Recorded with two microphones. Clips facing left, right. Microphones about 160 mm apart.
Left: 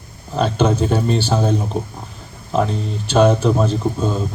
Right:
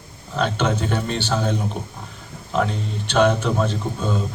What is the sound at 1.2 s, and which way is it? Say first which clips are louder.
Speech: left 4 dB; 35° left (ahead or behind).